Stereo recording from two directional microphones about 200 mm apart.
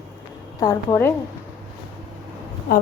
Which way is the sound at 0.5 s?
20° left (ahead or behind).